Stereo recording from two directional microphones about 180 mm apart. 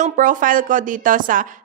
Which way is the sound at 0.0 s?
45° right (ahead or behind).